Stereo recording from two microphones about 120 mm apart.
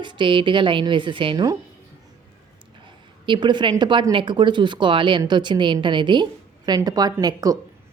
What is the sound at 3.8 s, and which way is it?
A woman's voice, 40° right (ahead or behind).